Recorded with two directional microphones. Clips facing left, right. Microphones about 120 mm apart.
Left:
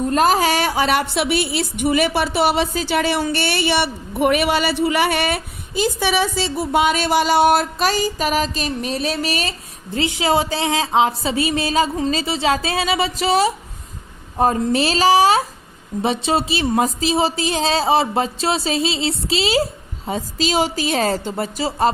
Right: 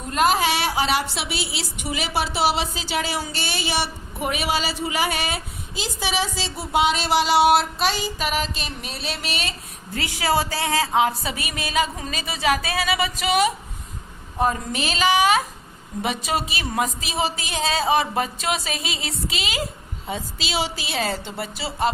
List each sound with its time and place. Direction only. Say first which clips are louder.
0.1 s a woman's voice: left 2 dB; 40° left (ahead or behind)
9.9 s a woman's voice: left 4 dB; 20° left (ahead or behind); by 21.8 s 40° left (ahead or behind)